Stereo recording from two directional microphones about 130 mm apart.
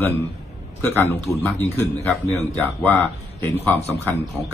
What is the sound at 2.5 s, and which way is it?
A man's voice, 15° left (ahead or behind).